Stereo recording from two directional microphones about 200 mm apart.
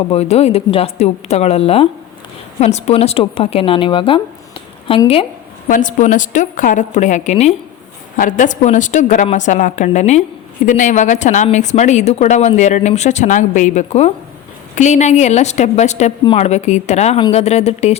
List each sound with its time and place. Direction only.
0.1 s a woman's voice: 30° left (ahead or behind)
5.6 s speech: 40° left (ahead or behind)